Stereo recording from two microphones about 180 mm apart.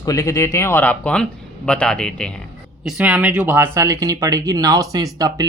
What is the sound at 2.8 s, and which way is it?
Speech, 5° right (ahead or behind).